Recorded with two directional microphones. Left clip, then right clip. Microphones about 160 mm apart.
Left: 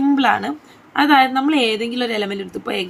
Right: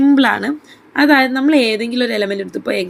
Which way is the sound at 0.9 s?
30° right (ahead or behind).